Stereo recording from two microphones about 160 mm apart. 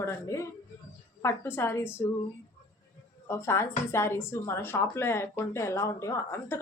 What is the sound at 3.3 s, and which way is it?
Speech, 15° left (ahead or behind).